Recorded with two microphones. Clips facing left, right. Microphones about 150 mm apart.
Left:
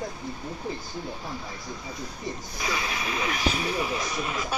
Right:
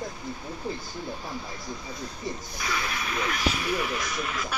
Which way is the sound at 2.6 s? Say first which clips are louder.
Left 1 dB; 20° left (ahead or behind).